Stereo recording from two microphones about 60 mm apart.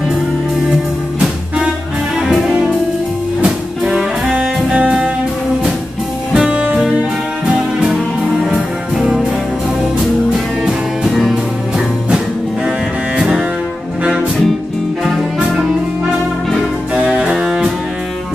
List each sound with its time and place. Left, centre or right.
2.1 s music: centre
6.3 s music: centre
10.6 s music: centre
12.6 s double bass: centre
15.0 s music: centre
16.9 s music: centre